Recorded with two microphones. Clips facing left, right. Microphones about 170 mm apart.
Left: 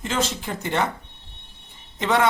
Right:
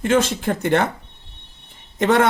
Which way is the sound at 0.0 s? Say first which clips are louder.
Right 8 dB; 60° right (ahead or behind).